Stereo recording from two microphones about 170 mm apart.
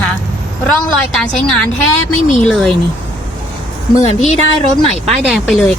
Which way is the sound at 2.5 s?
5° left (ahead or behind).